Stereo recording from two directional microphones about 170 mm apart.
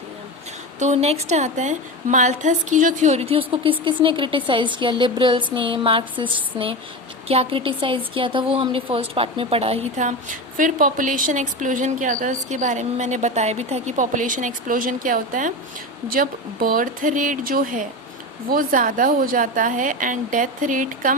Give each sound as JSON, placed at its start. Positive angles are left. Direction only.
{"t": 0.8, "sound": "a woman's voice", "side_deg": -40}
{"t": 5.5, "sound": "a sound", "side_deg": -30}
{"t": 7.3, "sound": "a woman's voice", "side_deg": -35}